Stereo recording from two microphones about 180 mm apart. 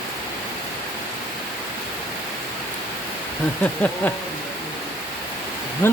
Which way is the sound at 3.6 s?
10° left (ahead or behind).